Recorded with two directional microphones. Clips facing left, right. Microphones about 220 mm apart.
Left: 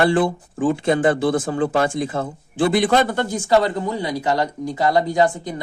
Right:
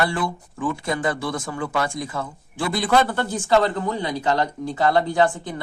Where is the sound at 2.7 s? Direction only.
20° left (ahead or behind).